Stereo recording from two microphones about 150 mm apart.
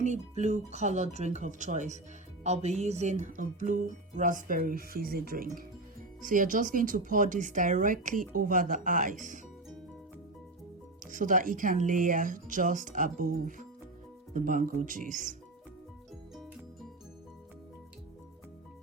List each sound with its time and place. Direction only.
0.0 s speech: 50° right (ahead or behind); by 5.6 s 75° right (ahead or behind)
6.2 s speech: 65° right (ahead or behind)
11.0 s speech: 60° right (ahead or behind)